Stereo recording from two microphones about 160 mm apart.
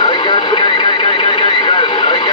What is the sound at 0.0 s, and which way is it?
Vehicle, 30° left (ahead or behind).